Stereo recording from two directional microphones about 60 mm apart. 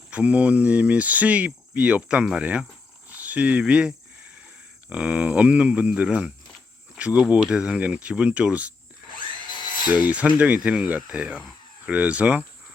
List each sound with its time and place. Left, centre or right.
0.1 s speech: right
3.1 s cricket: right
3.6 s speech: centre
9.9 s speech: right